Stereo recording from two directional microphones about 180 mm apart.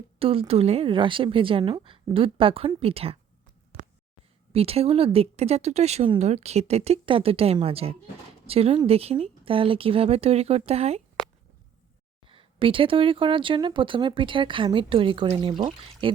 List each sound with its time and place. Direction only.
0.2 s speech: 30° right (ahead or behind)
4.5 s speech: 35° right (ahead or behind)
12.3 s speech: 30° right (ahead or behind)